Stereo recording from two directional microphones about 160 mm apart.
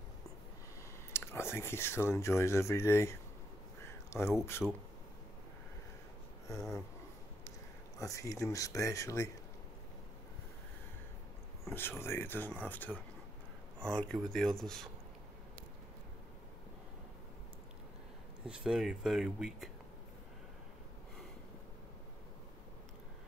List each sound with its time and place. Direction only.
1.1 s speech: 15° left (ahead or behind)
4.6 s speech: 5° right (ahead or behind)
6.4 s speech: 20° left (ahead or behind)
8.0 s speech: 20° left (ahead or behind)
11.7 s speech: 15° left (ahead or behind)
18.4 s speech: 5° right (ahead or behind)